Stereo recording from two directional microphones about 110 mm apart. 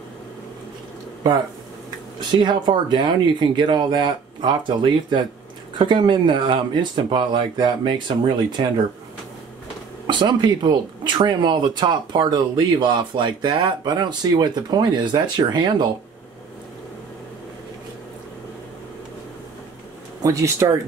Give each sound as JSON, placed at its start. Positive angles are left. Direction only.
{"t": 2.1, "sound": "speech", "side_deg": -45}
{"t": 10.0, "sound": "speech", "side_deg": -45}
{"t": 20.2, "sound": "speech", "side_deg": -30}